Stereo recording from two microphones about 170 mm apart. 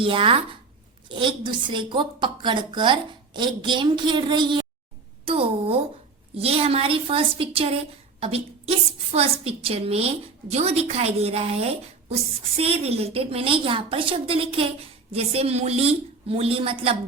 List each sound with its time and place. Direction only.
0.0 s a woman's voice: 30° right (ahead or behind)
9.1 s a woman's voice: 35° right (ahead or behind)